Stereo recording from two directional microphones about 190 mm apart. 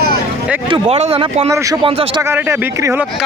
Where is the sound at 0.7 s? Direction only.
30° right (ahead or behind).